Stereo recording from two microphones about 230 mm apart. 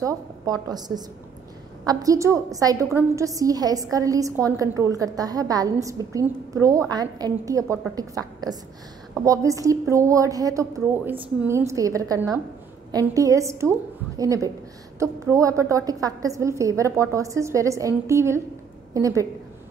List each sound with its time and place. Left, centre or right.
0.0 s a woman's voice: centre